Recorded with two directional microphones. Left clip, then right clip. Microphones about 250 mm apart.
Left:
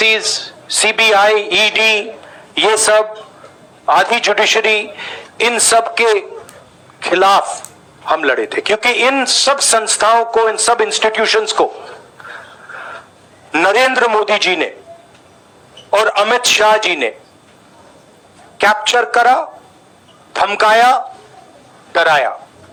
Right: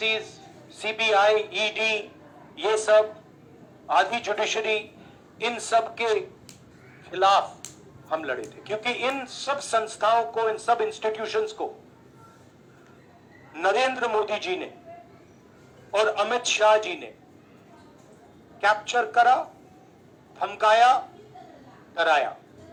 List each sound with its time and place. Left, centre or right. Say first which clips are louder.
0.0 s speech: left 14 dB; left
13.5 s speech: left 12 dB; left
15.9 s speech: left 11 dB; left
18.5 s speech: left 11 dB; left